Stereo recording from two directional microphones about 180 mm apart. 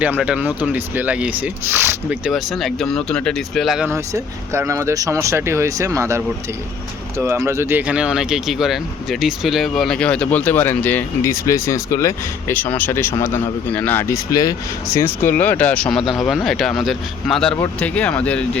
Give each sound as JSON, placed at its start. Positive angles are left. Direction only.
{"t": 0.0, "sound": "speech", "side_deg": -5}
{"t": 3.8, "sound": "speech", "side_deg": -15}